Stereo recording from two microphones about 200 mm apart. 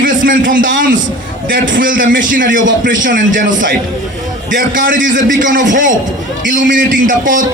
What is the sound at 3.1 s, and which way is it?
A man's voice, 40° right (ahead or behind).